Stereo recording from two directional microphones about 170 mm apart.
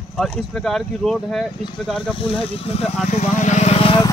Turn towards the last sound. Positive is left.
turn(degrees=35)  # may be behind; listen again after turning